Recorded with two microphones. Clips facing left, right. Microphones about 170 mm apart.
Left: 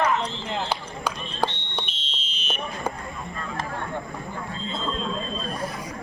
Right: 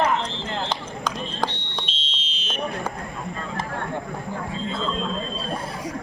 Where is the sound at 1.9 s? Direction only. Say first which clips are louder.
Right 2 dB; 90° right.